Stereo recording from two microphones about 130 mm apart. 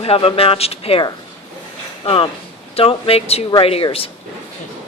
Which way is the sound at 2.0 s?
45° left (ahead or behind).